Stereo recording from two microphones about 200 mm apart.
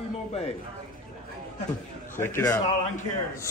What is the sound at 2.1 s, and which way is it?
Speech, 10° left (ahead or behind).